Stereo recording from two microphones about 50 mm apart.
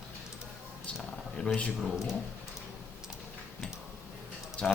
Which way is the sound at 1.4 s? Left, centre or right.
Centre.